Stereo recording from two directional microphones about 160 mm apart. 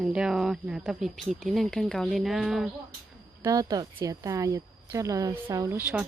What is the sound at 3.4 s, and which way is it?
A woman's voice, 25° right (ahead or behind).